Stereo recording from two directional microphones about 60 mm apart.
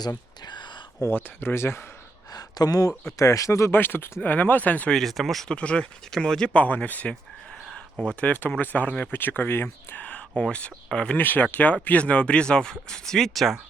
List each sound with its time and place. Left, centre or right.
1.1 s speech: left
2.3 s speech: left
3.1 s speech: left
3.7 s speech: left
4.2 s speech: left
4.9 s speech: centre
5.5 s speech: left
6.1 s speech: centre
6.5 s speech: left
8.2 s speech: left
10.0 s whispering: left
10.9 s speech: centre
11.2 s speech: left; by 13.6 s centre